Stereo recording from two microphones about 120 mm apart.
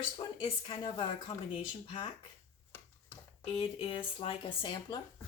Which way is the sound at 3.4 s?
50° left (ahead or behind).